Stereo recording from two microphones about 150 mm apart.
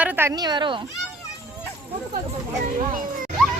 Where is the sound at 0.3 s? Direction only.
30° right (ahead or behind).